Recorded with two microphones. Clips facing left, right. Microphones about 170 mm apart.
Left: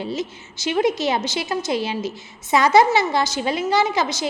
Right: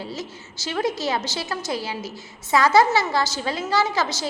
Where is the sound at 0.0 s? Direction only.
20° left (ahead or behind).